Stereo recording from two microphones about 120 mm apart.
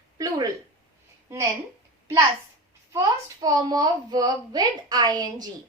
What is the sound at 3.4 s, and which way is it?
A woman's voice, 30° right (ahead or behind).